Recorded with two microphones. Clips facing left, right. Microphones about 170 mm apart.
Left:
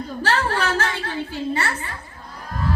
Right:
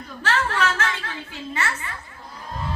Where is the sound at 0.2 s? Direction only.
35° left (ahead or behind).